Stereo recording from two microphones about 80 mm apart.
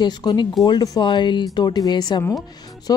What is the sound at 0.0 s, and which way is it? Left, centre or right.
Speech, left.